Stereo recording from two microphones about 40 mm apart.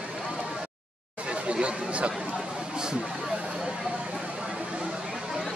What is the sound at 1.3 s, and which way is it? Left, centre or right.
Speech, right.